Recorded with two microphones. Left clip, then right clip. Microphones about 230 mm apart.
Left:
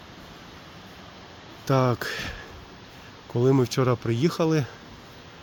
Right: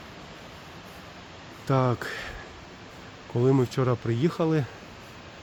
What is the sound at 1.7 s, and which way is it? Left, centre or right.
Speech, centre.